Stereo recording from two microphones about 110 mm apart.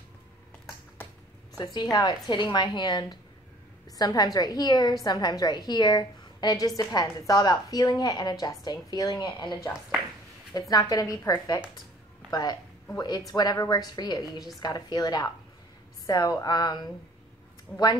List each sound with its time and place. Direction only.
1.6 s a woman's voice: 40° left (ahead or behind)
10.7 s a woman's voice: 35° left (ahead or behind)
17.7 s speech: centre (ahead or behind)